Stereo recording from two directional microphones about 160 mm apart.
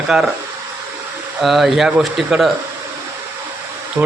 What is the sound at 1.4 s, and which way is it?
Speech, centre (ahead or behind).